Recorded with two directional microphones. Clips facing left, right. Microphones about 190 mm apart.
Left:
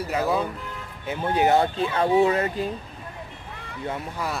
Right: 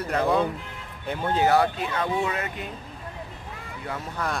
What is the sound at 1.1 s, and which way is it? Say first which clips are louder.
Speech: left 1 dB; 15° left (ahead or behind).